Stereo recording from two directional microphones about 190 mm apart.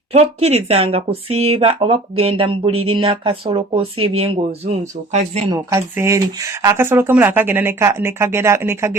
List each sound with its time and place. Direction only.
0.1 s speech: 35° right (ahead or behind)
5.5 s speech: 15° right (ahead or behind)